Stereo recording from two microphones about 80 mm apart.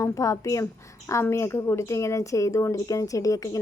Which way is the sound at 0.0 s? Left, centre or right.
Left.